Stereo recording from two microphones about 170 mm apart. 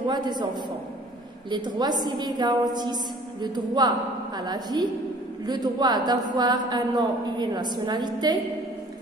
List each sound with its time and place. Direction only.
0.0 s a woman's voice: 25° right (ahead or behind)
2.0 s a woman's voice: 25° right (ahead or behind)